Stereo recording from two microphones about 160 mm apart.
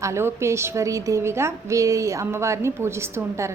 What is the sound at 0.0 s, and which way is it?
A woman's voice, 15° right (ahead or behind).